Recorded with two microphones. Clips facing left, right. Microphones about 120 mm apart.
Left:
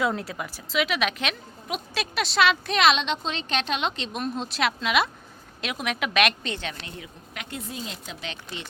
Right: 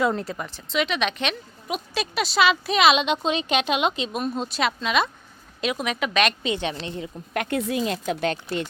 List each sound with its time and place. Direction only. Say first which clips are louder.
0.0 s speech: right 3 dB; centre (ahead or behind)
6.6 s a woman's voice: right 7 dB; 25° right (ahead or behind)
7.3 s speech: right 12 dB; 70° right (ahead or behind); by 8.4 s 50° right (ahead or behind)